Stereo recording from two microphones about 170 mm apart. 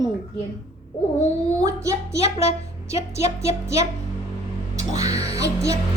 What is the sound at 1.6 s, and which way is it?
Music, 20° right (ahead or behind).